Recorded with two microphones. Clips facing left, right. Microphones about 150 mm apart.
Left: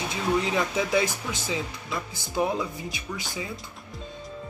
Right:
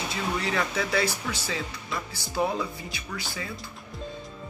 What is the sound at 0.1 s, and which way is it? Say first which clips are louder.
Speech: left 5 dB; 15° left (ahead or behind).